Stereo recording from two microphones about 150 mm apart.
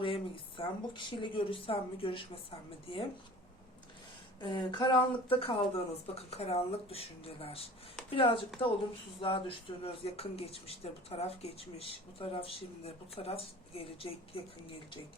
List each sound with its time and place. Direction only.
0.0 s speech: 35° left (ahead or behind)
4.4 s speech: 30° left (ahead or behind)